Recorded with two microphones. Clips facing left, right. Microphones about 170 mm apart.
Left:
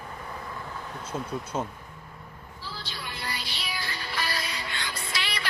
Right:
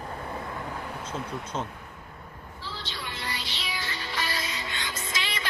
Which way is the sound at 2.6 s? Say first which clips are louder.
Right 1 dB; 10° left (ahead or behind).